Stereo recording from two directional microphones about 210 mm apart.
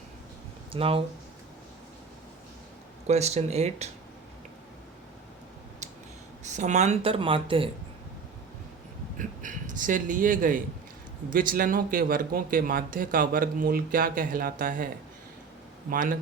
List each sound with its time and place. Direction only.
0.7 s speech: 25° right (ahead or behind)
3.1 s speech: 30° right (ahead or behind)
6.4 s speech: 35° right (ahead or behind)
9.1 s a man's voice: 40° right (ahead or behind)
15.9 s speech: 40° right (ahead or behind)